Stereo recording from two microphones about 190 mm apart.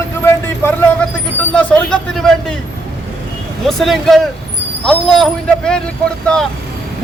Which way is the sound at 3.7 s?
Centre (ahead or behind).